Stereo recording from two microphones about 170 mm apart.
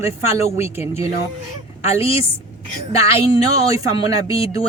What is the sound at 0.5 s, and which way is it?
Speech, 15° right (ahead or behind).